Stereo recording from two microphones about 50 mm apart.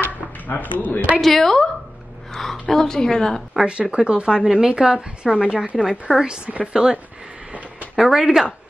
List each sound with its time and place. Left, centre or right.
0.0 s a sound: left
1.2 s a woman's voice: centre
3.5 s a woman's voice: right